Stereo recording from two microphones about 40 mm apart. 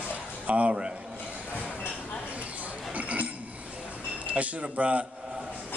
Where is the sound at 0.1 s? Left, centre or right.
Right.